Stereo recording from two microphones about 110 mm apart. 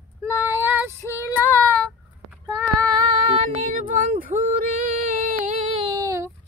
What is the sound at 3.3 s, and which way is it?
Female singing, 85° right.